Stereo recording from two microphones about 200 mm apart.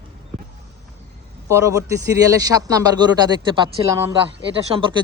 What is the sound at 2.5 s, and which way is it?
A man's voice, 15° right (ahead or behind).